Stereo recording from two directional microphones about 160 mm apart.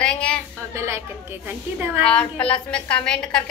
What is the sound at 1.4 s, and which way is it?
Speech, 15° right (ahead or behind).